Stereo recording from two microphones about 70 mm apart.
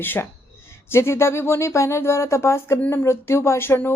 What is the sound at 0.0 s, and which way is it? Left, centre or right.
Speech, left.